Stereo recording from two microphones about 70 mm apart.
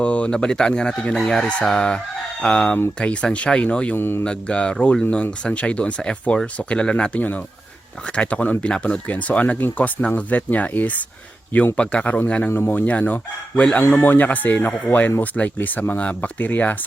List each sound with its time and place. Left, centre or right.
0.0 s speech: centre
3.9 s speech: left
4.2 s speech: centre
12.5 s speech: left